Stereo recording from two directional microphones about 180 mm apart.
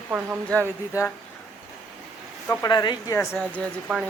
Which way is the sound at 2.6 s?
25° left (ahead or behind).